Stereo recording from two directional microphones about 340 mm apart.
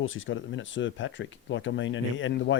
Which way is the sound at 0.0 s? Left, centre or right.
Left.